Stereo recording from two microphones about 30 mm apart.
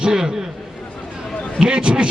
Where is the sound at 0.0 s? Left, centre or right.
Right.